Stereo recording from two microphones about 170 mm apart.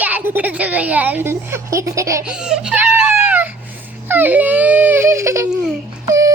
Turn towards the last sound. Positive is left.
turn(degrees=-20)  # may be behind; listen again after turning